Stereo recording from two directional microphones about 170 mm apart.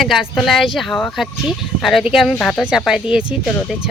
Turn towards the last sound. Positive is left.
turn(degrees=-5)  # may be behind; listen again after turning